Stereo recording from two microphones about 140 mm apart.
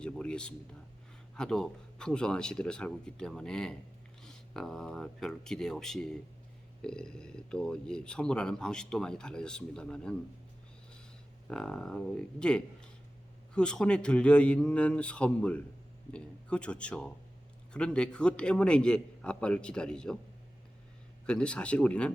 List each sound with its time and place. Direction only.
0.0 s a sound: 5° left (ahead or behind)
1.4 s speech: 5° left (ahead or behind)
11.4 s a man's voice: 5° left (ahead or behind)
21.2 s a man's voice: 5° left (ahead or behind)